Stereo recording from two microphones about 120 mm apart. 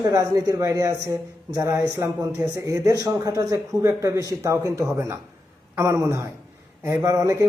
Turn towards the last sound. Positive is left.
turn(degrees=-25)  # may be behind; listen again after turning